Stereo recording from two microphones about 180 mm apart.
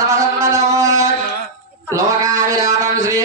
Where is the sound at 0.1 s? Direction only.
15° right (ahead or behind).